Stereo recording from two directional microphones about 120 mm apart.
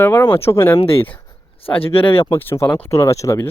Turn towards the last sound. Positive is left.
turn(degrees=25)  # may be behind; listen again after turning